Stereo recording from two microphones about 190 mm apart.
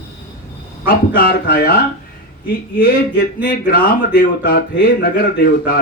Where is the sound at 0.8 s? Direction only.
50° left (ahead or behind).